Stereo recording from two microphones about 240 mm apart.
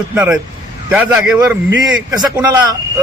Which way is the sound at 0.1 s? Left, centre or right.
Centre.